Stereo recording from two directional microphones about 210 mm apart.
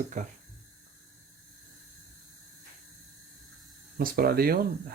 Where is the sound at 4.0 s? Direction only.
45° right (ahead or behind).